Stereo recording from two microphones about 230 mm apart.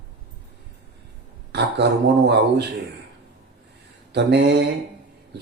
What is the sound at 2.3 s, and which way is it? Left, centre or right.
Speech, right.